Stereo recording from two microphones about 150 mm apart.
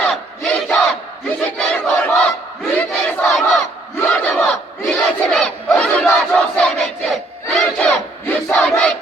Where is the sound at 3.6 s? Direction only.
15° left (ahead or behind).